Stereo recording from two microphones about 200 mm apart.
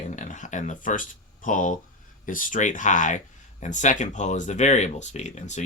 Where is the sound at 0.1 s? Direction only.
35° left (ahead or behind).